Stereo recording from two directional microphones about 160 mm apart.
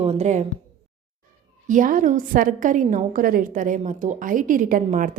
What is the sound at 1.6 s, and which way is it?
A woman's voice, 55° right (ahead or behind).